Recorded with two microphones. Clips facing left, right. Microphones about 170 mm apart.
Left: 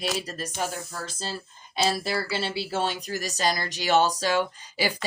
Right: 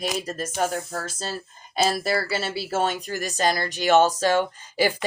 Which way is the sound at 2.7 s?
50° right (ahead or behind).